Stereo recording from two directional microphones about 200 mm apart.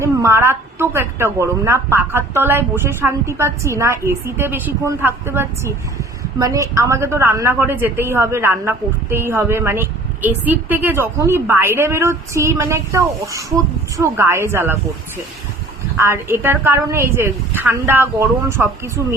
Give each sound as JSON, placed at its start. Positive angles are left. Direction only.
{"t": 0.0, "sound": "a woman's voice", "side_deg": -15}
{"t": 16.0, "sound": "a woman's voice", "side_deg": -15}